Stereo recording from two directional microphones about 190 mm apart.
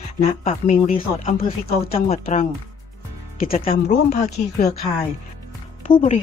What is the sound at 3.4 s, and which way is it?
Speech, 50° left (ahead or behind).